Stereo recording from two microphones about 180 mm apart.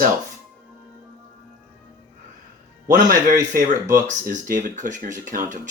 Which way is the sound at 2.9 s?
45° right (ahead or behind).